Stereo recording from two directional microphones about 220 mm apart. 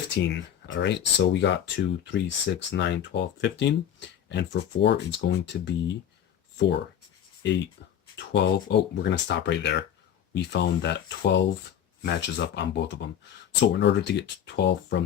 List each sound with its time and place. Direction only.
0.1 s speech: 55° left (ahead or behind)
8.1 s speech: 50° left (ahead or behind)